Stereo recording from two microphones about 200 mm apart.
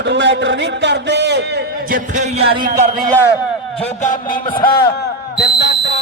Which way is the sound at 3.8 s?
40° left (ahead or behind).